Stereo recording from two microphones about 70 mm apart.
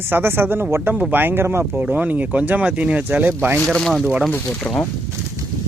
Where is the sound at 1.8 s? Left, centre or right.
Right.